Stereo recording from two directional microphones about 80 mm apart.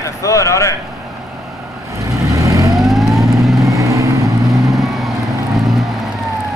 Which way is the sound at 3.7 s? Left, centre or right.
Right.